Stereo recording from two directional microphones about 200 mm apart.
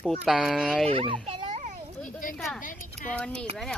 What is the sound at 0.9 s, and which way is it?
Speech, 30° right (ahead or behind).